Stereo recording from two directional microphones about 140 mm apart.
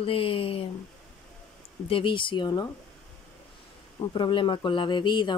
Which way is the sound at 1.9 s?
35° left (ahead or behind).